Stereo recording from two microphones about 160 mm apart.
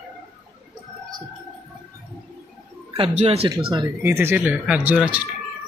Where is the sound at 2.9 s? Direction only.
40° right (ahead or behind).